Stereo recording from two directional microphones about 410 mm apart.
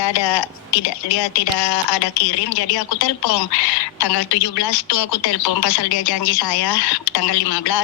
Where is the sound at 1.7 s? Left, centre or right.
Left.